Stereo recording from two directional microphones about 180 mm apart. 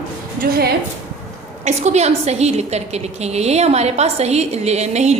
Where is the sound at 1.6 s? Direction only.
40° right (ahead or behind).